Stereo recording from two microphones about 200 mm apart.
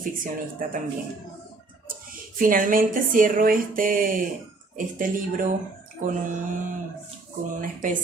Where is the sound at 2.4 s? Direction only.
45° right (ahead or behind).